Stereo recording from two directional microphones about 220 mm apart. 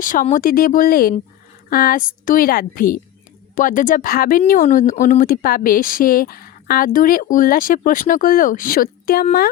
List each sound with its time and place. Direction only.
0.0 s speech: 35° left (ahead or behind)